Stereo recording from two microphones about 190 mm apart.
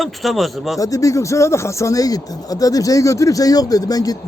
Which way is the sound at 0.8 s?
15° left (ahead or behind).